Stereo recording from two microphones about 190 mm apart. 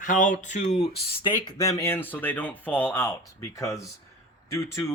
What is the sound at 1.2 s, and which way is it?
Speech, 20° left (ahead or behind).